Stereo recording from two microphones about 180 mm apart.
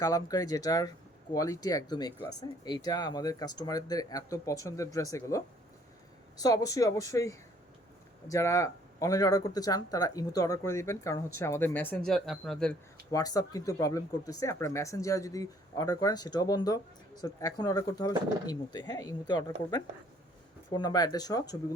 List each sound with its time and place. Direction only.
0.0 s speech: 20° left (ahead or behind); by 12.7 s centre (ahead or behind)
13.1 s speech: 20° left (ahead or behind)